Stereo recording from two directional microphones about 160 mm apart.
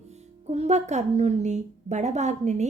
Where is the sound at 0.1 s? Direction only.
45° right (ahead or behind).